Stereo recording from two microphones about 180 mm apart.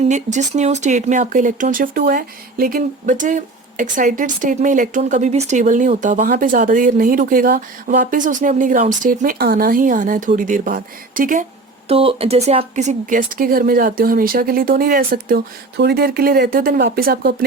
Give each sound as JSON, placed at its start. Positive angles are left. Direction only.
{"t": 0.0, "sound": "speech", "side_deg": -40}
{"t": 11.9, "sound": "speech", "side_deg": -30}